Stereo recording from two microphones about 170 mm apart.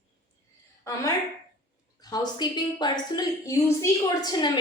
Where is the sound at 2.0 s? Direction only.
25° left (ahead or behind).